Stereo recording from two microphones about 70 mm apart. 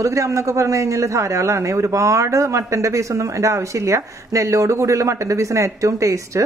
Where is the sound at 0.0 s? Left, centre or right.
Right.